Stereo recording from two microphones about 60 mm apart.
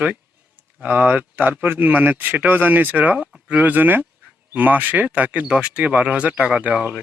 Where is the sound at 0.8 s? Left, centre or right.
Right.